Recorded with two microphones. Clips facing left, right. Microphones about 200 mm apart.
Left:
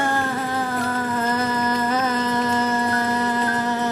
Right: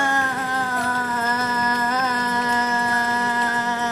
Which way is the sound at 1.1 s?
10° left (ahead or behind).